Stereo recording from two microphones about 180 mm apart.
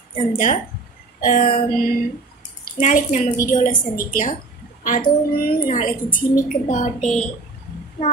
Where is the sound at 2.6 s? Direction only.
45° left (ahead or behind).